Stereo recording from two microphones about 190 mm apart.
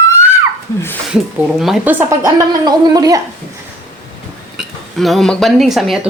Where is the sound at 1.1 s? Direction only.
Centre (ahead or behind); by 3.2 s 20° right (ahead or behind).